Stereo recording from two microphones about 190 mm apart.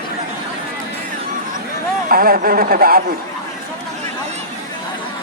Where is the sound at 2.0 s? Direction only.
50° right (ahead or behind).